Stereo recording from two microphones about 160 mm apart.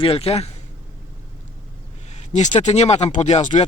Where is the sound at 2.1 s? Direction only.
45° left (ahead or behind).